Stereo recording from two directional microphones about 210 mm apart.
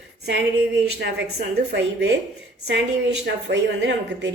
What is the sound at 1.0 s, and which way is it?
A woman's voice, 55° right (ahead or behind).